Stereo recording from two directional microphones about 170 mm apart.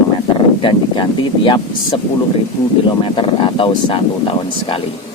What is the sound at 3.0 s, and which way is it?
Speech, 30° left (ahead or behind).